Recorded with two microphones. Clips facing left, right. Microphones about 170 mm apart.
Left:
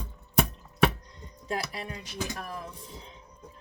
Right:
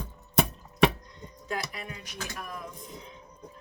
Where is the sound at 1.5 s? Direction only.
30° left (ahead or behind).